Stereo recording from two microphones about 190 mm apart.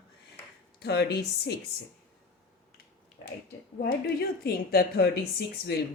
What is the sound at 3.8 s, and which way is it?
Speech, 55° left (ahead or behind).